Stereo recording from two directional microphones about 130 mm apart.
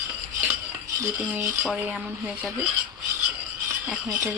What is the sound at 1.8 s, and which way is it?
Speech, 10° right (ahead or behind).